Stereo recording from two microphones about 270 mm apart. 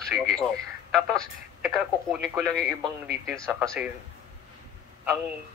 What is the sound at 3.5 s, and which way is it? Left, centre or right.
Speech, centre.